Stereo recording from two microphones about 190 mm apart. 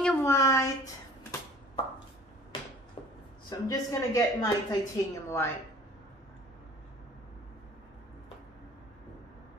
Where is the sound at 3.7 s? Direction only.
20° left (ahead or behind).